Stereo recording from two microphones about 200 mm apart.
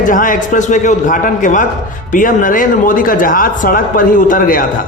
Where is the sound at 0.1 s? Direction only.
40° left (ahead or behind).